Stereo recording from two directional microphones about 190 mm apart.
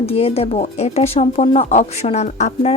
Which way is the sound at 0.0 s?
30° left (ahead or behind).